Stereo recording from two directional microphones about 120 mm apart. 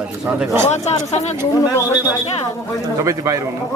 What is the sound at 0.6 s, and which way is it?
Speech, 70° left (ahead or behind).